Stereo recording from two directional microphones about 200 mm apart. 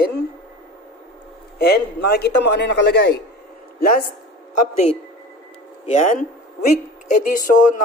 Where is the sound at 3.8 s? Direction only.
45° left (ahead or behind).